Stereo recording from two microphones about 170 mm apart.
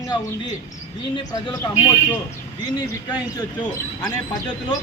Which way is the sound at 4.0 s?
20° left (ahead or behind).